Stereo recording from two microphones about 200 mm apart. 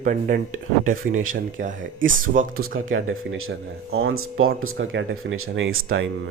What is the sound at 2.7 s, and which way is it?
Speech, 80° right.